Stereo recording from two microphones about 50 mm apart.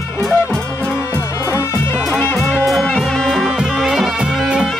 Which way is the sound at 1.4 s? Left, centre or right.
Left.